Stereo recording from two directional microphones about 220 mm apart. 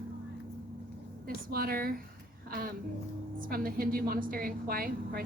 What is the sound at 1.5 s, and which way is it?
Speech, 45° right (ahead or behind).